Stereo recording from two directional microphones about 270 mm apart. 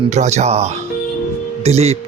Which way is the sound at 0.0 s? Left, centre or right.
Right.